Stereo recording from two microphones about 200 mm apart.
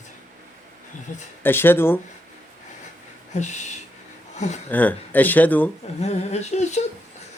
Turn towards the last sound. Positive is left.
turn(degrees=35)  # may be behind; listen again after turning